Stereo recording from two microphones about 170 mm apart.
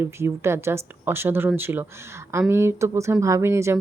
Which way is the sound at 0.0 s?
15° right (ahead or behind).